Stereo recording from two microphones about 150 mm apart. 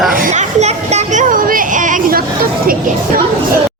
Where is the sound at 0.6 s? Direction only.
50° right (ahead or behind); by 2.7 s 75° right (ahead or behind).